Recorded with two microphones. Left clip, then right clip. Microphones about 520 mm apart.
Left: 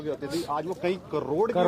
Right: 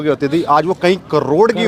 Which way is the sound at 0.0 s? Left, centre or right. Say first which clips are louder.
Right 15 dB; right.